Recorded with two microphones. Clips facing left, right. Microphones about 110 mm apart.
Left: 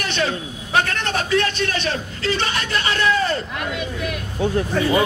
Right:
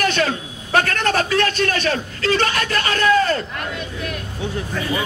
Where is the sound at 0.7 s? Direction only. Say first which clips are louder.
Right 3 dB; 45° right (ahead or behind).